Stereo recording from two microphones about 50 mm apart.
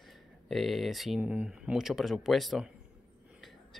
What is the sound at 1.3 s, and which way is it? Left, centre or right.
Speech, right.